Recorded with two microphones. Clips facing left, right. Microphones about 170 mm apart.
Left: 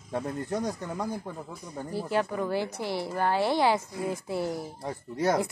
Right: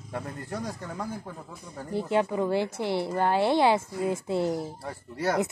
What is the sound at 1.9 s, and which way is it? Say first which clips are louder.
A woman's voice: right 3 dB; 20° right (ahead or behind).